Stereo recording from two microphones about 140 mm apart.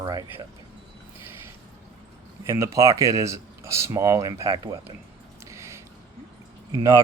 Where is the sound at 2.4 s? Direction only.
20° right (ahead or behind).